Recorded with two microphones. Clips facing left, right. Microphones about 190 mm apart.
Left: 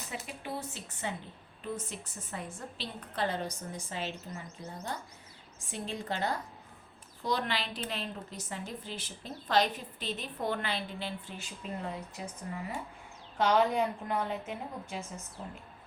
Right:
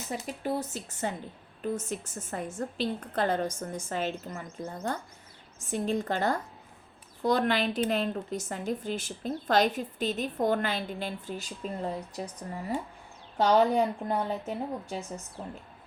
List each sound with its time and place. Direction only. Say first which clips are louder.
0.1 s a woman's voice: right 8 dB; 40° right (ahead or behind)